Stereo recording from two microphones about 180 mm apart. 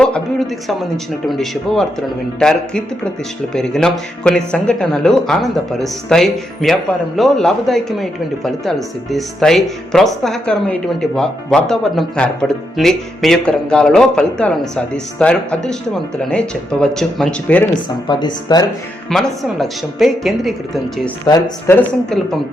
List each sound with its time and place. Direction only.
0.0 s speech: centre (ahead or behind)
17.8 s speech: 25° left (ahead or behind)
19.1 s speech: centre (ahead or behind)
21.2 s speech: 20° left (ahead or behind)
21.8 s speech: 5° left (ahead or behind)